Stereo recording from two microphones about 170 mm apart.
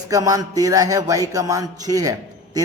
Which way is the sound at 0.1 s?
20° right (ahead or behind).